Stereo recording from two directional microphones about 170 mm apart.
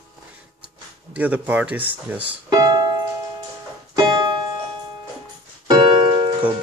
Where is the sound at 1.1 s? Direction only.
10° right (ahead or behind).